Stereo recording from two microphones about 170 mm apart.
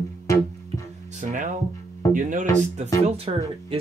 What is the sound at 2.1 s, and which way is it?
Speech, 50° right (ahead or behind).